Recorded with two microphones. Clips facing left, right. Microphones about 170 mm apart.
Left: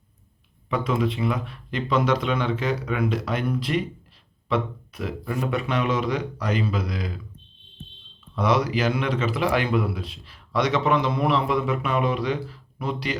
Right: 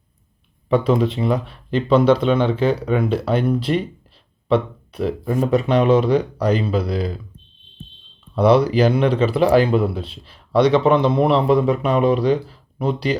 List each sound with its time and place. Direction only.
0.7 s speech: 30° right (ahead or behind)
8.4 s speech: 30° right (ahead or behind)